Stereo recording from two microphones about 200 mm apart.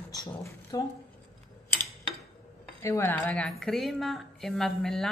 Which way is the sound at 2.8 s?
10° left (ahead or behind).